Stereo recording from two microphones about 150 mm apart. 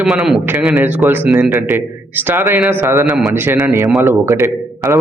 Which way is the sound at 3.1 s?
5° right (ahead or behind).